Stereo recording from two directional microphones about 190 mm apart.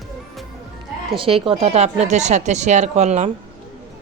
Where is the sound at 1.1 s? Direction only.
30° right (ahead or behind).